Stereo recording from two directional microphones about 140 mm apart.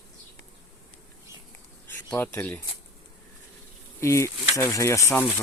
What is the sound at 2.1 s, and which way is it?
Speech, 15° left (ahead or behind).